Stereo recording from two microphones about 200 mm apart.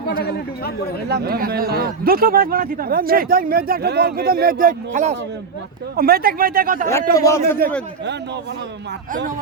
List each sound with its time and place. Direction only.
0.1 s speech: 50° left (ahead or behind)
1.1 s a man's voice: 50° right (ahead or behind)
7.2 s a man's voice: 15° left (ahead or behind)